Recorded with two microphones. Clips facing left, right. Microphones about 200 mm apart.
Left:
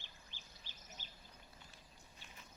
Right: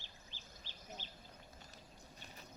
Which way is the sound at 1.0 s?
45° left (ahead or behind).